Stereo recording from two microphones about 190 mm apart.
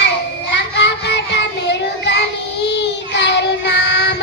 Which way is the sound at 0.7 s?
65° left (ahead or behind).